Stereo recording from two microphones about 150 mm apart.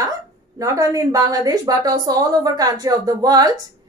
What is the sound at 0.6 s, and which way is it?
A woman's voice, 20° right (ahead or behind).